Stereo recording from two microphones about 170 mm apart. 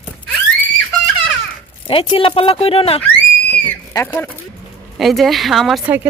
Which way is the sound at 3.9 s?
20° left (ahead or behind).